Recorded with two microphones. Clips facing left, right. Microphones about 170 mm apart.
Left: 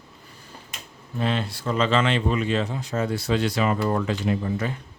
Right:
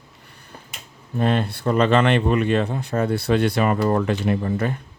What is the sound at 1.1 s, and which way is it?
Speech, 50° right (ahead or behind).